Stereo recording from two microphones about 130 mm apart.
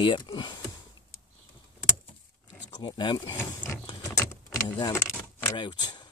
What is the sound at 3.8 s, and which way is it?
Vehicle, 25° left (ahead or behind).